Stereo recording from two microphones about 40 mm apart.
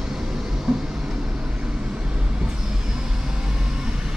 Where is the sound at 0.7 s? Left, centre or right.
Centre.